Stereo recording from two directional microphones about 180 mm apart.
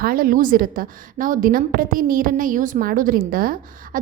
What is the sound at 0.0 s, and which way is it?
A woman's voice, 55° right (ahead or behind).